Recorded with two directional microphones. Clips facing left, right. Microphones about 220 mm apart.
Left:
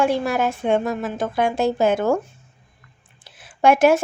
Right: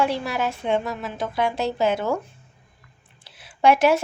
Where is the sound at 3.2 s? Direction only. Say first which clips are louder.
Left 2 dB; 50° left (ahead or behind).